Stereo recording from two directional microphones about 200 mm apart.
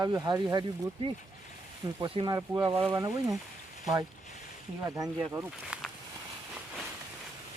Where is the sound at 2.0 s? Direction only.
20° right (ahead or behind).